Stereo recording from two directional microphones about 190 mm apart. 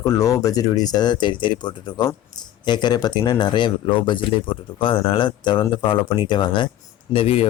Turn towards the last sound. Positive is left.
turn(degrees=30)  # may be behind; listen again after turning